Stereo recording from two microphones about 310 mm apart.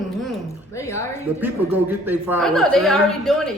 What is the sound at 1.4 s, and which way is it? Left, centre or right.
A woman's voice, centre.